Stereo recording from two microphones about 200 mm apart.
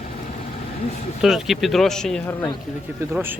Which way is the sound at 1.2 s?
Centre (ahead or behind).